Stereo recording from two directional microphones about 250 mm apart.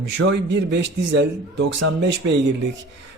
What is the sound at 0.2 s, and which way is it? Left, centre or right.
Speech, right.